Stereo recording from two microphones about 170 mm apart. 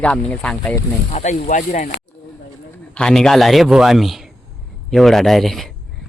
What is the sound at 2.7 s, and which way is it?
A man's voice, 5° left (ahead or behind).